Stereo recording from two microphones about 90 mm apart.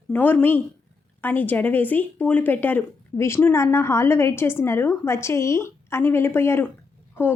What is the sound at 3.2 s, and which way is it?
A woman's voice, 30° left (ahead or behind).